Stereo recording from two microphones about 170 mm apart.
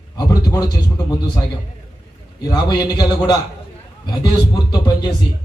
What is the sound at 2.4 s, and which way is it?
A man's voice, 25° left (ahead or behind).